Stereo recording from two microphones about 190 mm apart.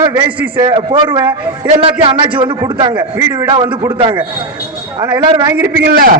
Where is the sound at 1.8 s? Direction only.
25° right (ahead or behind).